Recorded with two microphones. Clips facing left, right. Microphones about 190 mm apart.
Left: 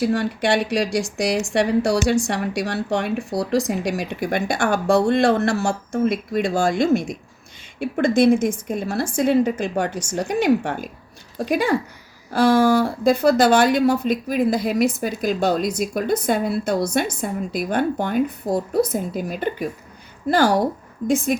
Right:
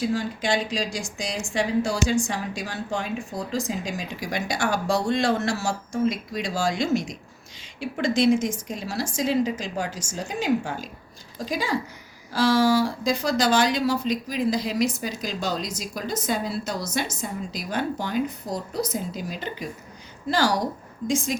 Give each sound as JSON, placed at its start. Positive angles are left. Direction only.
{"t": 0.0, "sound": "a woman's voice", "side_deg": 65}